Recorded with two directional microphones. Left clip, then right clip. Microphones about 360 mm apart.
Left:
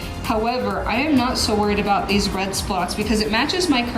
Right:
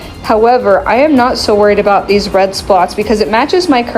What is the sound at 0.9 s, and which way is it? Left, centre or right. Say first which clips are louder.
A woman's voice: right 11 dB; centre.